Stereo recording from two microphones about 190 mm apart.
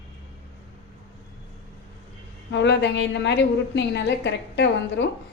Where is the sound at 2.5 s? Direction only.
65° left (ahead or behind).